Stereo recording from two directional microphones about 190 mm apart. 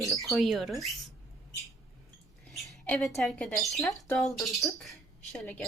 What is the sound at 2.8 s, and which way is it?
Speech, 5° left (ahead or behind).